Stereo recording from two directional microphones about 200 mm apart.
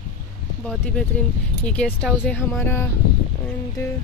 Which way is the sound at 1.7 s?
5° left (ahead or behind).